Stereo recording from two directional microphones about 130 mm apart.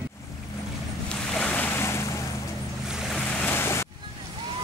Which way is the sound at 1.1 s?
10° left (ahead or behind).